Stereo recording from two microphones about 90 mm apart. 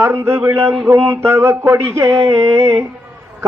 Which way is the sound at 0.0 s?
25° right (ahead or behind).